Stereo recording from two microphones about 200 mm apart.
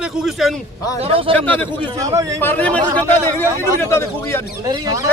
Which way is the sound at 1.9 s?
15° right (ahead or behind).